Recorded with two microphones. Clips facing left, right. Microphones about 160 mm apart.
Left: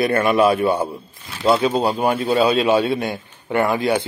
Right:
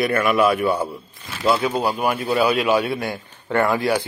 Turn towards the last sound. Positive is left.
turn(degrees=20)  # may be behind; listen again after turning